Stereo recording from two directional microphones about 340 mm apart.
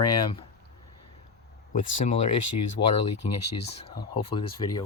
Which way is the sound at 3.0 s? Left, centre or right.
Left.